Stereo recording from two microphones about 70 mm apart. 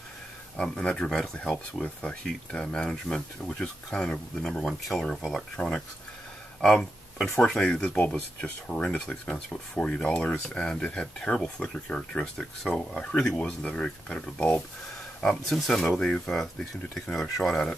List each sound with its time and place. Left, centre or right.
0.6 s speech: centre
5.6 s speech: centre
6.6 s a sound: centre
7.3 s speech: centre